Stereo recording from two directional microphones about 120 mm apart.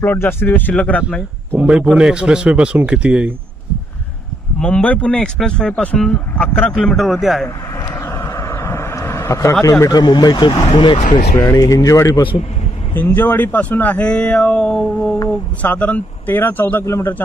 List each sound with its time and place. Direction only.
0.0 s speech: 20° left (ahead or behind)
1.5 s a man's voice: 10° right (ahead or behind)
4.6 s speech: 10° left (ahead or behind)
7.4 s vehicle: 20° left (ahead or behind)
9.8 s speech: 35° left (ahead or behind)
11.3 s speech: 25° left (ahead or behind)
12.9 s speech: 15° left (ahead or behind)